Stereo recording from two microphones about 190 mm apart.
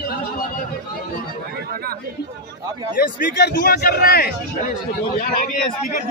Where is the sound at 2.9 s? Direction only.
55° left (ahead or behind).